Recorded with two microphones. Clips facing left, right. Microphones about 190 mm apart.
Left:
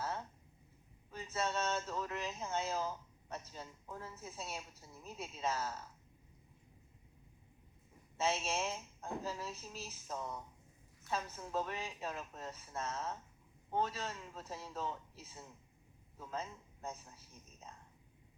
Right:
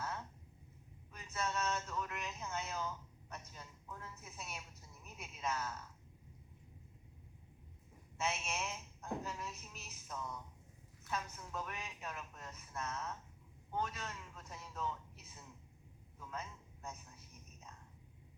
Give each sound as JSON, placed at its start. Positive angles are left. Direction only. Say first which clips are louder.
{"t": 1.1, "sound": "speech", "louder": "left 3 dB", "side_deg": 30}
{"t": 8.2, "sound": "speech", "louder": "left 5 dB", "side_deg": 30}
{"t": 16.1, "sound": "a sound", "louder": "left 4 dB", "side_deg": 30}